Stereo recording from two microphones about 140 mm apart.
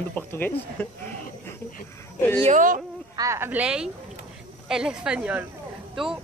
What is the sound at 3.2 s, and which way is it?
Speech, 20° right (ahead or behind).